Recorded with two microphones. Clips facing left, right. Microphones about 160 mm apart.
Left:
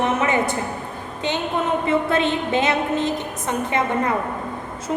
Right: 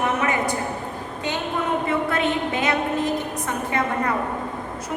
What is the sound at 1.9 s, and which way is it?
A woman's voice, 25° left (ahead or behind).